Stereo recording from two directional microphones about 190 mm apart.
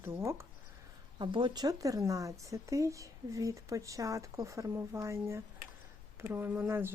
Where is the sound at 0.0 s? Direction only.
15° right (ahead or behind).